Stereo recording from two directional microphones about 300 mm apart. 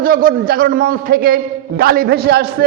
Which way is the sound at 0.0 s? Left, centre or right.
Right.